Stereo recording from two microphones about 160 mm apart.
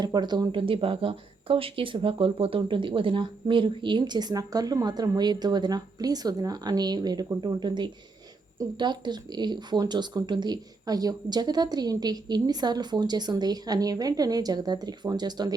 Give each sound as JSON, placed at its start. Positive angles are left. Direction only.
{"t": 0.0, "sound": "speech", "side_deg": -25}